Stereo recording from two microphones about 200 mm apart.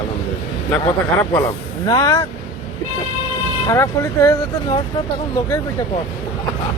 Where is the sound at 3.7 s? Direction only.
15° left (ahead or behind).